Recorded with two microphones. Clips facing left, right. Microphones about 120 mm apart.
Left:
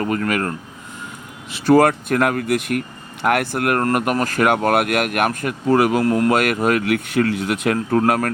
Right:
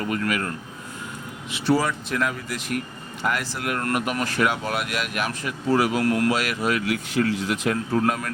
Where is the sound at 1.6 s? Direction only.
55° left (ahead or behind).